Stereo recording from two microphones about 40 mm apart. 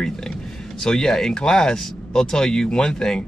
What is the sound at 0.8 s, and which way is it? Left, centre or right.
Speech, centre.